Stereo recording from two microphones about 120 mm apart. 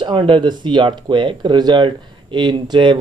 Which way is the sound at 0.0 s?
45° right (ahead or behind).